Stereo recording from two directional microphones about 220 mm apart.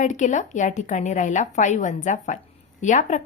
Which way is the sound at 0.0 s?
35° left (ahead or behind).